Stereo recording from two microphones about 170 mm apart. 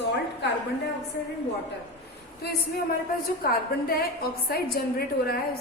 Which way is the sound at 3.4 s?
60° left (ahead or behind).